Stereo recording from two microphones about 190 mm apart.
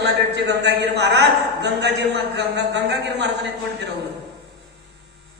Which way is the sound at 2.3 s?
65° right (ahead or behind).